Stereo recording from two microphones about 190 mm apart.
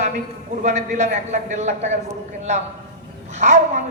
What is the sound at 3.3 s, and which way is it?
Speech, 40° right (ahead or behind).